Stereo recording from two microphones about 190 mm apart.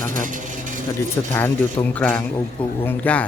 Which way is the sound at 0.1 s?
45° right (ahead or behind).